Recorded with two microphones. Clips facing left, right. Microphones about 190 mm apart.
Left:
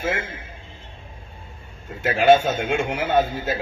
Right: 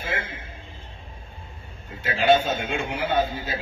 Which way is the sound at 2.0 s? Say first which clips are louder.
Left 4 dB; 65° left (ahead or behind).